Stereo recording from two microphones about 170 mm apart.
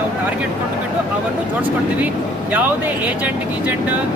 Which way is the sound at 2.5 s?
10° right (ahead or behind).